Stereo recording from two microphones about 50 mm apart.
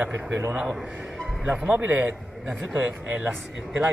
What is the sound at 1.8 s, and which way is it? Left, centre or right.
A man's voice, right.